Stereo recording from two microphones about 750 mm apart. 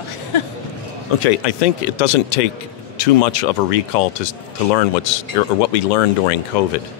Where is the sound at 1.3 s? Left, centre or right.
Left.